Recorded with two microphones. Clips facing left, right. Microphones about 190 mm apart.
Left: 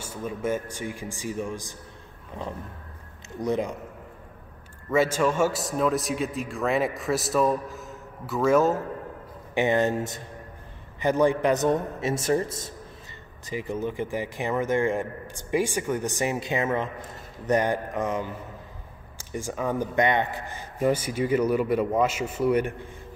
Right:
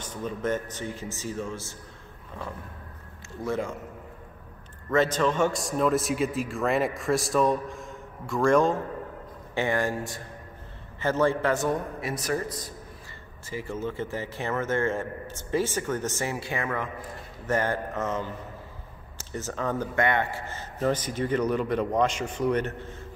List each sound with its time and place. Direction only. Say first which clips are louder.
0.0 s a man's voice: left 1 dB; 10° left (ahead or behind)
3.3 s a man's voice: left 3 dB; 20° left (ahead or behind)
4.9 s a man's voice: left 1 dB; 10° left (ahead or behind)
9.5 s a man's voice: left 4 dB; 20° left (ahead or behind)